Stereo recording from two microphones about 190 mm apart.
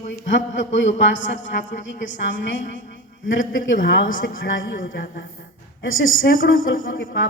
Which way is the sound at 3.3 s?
80° left.